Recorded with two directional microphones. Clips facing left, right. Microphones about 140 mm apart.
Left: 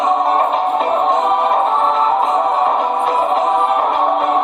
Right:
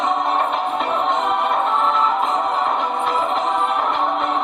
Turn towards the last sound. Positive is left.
turn(degrees=45)  # may be behind; listen again after turning